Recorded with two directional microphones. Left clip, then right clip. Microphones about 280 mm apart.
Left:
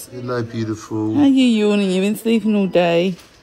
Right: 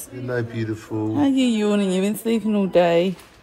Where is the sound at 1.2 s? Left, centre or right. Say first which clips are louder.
Left 6 dB; left.